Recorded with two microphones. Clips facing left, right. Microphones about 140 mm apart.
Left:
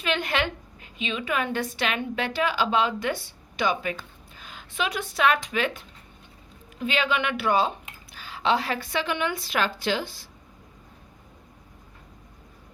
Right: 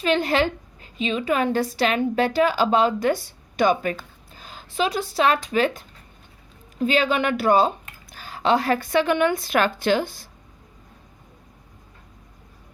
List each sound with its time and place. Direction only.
0.0 s a woman's voice: 35° right (ahead or behind)